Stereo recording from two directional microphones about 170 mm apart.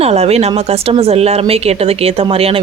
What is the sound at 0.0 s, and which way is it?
Speech, 35° right (ahead or behind).